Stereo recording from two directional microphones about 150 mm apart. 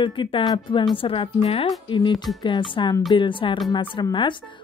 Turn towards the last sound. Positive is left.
turn(degrees=30)  # may be behind; listen again after turning